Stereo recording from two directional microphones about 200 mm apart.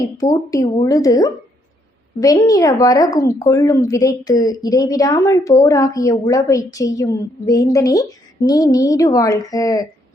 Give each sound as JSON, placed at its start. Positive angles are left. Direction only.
{"t": 0.2, "sound": "a woman's voice", "side_deg": 15}